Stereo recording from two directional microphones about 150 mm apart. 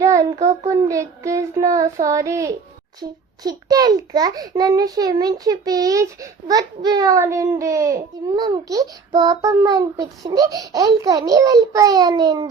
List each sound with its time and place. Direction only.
0.0 s child singing: 20° right (ahead or behind)
0.7 s a child's voice: 20° right (ahead or behind)